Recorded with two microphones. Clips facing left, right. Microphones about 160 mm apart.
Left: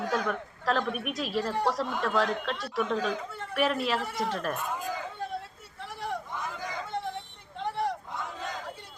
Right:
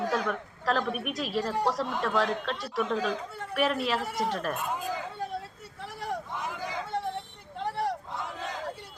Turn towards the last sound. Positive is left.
turn(degrees=-5)  # may be behind; listen again after turning